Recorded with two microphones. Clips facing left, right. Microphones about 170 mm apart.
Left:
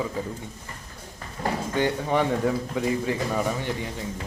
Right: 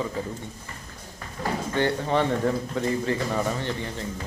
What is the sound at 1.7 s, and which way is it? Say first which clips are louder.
A man's voice: even; 10° left (ahead or behind).